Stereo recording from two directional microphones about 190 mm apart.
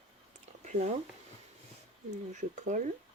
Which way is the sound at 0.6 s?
40° right (ahead or behind).